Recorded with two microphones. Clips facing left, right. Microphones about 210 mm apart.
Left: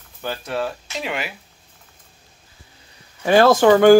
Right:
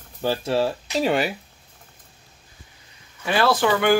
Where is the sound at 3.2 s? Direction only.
45° left (ahead or behind).